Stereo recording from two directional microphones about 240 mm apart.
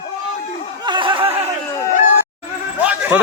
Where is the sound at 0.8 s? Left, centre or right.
Centre.